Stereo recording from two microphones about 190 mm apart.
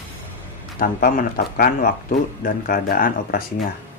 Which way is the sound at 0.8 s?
50° left (ahead or behind).